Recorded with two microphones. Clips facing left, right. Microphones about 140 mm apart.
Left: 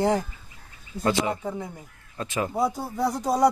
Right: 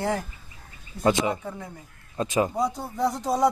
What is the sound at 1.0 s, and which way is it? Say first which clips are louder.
Speech: right 1 dB; 20° right (ahead or behind).